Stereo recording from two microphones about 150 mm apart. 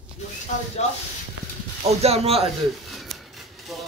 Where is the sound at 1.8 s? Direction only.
45° right (ahead or behind).